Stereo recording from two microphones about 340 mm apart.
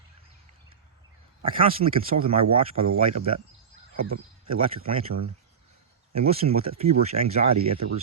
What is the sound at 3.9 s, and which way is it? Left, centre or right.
Speech, right.